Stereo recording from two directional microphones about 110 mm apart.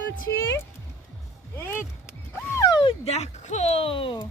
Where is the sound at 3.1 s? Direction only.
80° left; by 4.3 s 50° left (ahead or behind).